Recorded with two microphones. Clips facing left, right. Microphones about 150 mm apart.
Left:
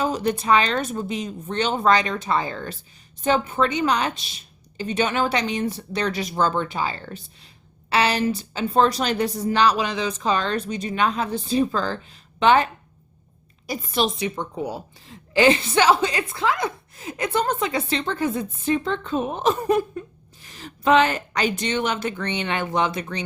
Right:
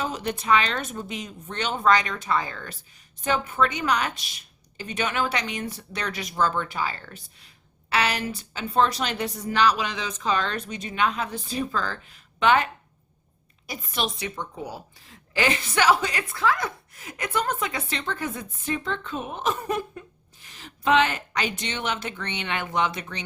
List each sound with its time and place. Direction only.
0.0 s a woman's voice: 35° left (ahead or behind)
13.7 s a woman's voice: 35° left (ahead or behind)
14.2 s a woman's voice: 20° left (ahead or behind)